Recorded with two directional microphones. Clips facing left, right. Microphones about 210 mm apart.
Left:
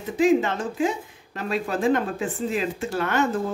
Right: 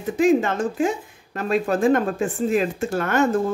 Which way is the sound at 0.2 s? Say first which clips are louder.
Right 2 dB; 45° right (ahead or behind).